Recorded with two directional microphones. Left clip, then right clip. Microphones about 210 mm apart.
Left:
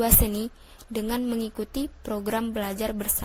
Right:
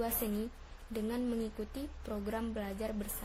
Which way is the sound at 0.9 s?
35° left (ahead or behind).